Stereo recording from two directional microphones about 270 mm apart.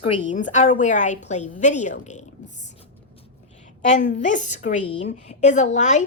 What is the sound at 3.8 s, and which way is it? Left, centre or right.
A woman's voice, left.